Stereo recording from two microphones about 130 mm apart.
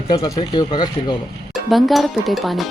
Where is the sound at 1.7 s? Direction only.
Centre (ahead or behind).